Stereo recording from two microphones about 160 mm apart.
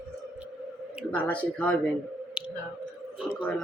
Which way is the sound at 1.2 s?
10° left (ahead or behind).